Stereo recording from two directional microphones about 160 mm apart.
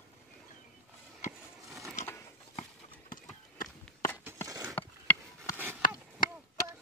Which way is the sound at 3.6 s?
5° left (ahead or behind).